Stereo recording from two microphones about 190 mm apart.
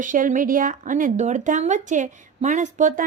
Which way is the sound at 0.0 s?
45° right (ahead or behind).